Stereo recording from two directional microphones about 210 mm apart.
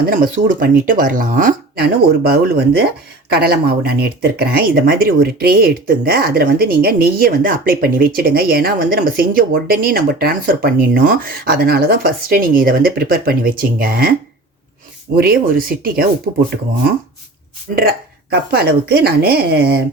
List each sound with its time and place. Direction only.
0.0 s speech: 40° right (ahead or behind)
15.1 s speech: 45° right (ahead or behind)
17.7 s speech: 45° right (ahead or behind)